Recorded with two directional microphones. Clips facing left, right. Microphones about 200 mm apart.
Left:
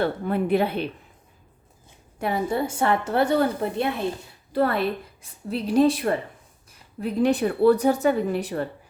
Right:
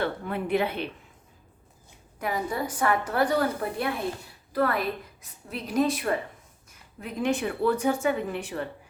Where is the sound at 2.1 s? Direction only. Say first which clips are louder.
Left 5 dB; 30° left (ahead or behind).